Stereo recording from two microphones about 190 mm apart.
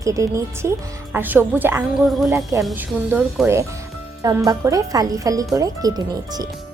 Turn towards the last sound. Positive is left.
turn(degrees=-20)  # may be behind; listen again after turning